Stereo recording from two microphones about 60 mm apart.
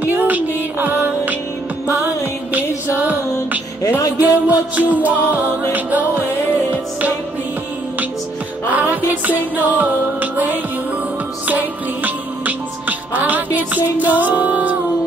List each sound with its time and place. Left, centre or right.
0.0 s music: right
4.2 s music: right
9.6 s music: right